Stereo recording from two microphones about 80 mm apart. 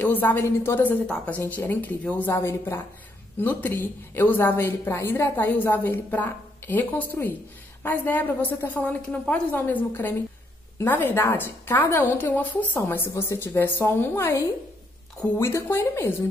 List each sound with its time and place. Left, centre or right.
0.0 s a woman's voice: left
2.2 s a woman's voice: left
12.2 s a woman's voice: left